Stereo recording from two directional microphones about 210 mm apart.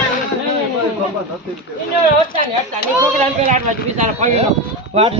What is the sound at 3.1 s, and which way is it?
A man's voice, 35° right (ahead or behind).